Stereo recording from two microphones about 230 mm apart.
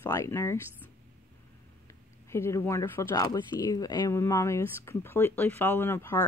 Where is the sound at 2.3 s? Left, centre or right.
Centre.